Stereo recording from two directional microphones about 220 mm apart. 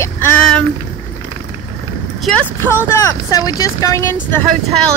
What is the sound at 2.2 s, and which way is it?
A woman's voice, 5° left (ahead or behind).